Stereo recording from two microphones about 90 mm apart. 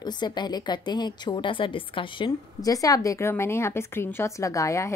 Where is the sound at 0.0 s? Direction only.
55° left (ahead or behind).